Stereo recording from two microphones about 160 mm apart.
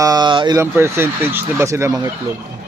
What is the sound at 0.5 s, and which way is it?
Speech, 15° right (ahead or behind).